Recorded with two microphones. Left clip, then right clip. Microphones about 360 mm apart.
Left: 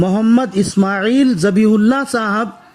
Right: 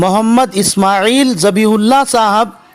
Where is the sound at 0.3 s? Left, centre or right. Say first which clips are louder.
Right 4 dB; centre.